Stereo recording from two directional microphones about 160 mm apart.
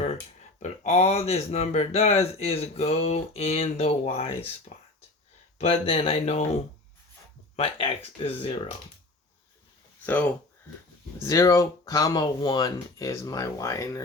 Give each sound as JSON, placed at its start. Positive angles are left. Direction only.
{"t": 0.6, "sound": "speech", "side_deg": 40}
{"t": 5.5, "sound": "speech", "side_deg": 40}
{"t": 10.1, "sound": "speech", "side_deg": 10}